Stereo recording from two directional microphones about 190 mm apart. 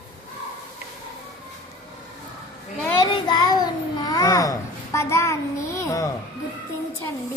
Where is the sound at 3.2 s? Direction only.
20° left (ahead or behind).